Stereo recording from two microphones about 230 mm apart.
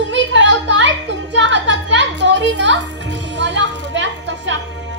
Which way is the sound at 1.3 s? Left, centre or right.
Right.